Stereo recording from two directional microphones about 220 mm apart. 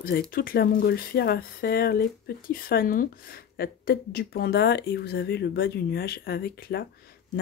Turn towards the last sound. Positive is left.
turn(degrees=45)  # may be behind; listen again after turning